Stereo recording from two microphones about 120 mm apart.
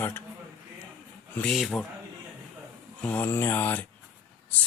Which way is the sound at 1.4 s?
Centre (ahead or behind).